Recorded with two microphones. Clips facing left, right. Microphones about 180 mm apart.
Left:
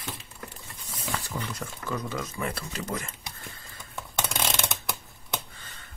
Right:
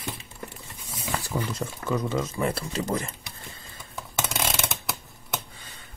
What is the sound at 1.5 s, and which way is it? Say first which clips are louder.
Speech: right 5 dB; 25° right (ahead or behind).